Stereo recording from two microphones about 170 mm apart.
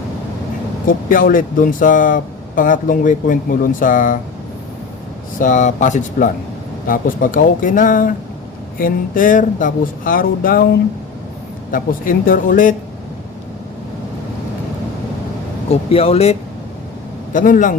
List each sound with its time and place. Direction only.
0.9 s speech: 55° left (ahead or behind)
5.4 s speech: 45° left (ahead or behind)
11.7 s speech: 55° left (ahead or behind)
15.7 s speech: 35° left (ahead or behind)
17.3 s speech: 50° left (ahead or behind)